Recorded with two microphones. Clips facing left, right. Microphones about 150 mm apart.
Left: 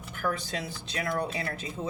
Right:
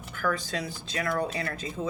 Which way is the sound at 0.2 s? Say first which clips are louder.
Right 2 dB; 20° left (ahead or behind).